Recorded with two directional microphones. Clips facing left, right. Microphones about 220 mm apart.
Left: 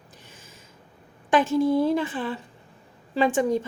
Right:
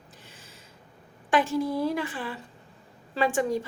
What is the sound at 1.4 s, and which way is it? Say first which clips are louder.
A woman's voice: left 5 dB; 25° left (ahead or behind).